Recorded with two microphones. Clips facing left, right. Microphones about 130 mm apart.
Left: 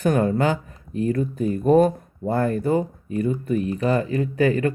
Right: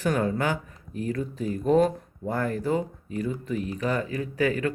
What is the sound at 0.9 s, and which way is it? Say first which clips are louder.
Speech: left 7 dB; 65° left (ahead or behind).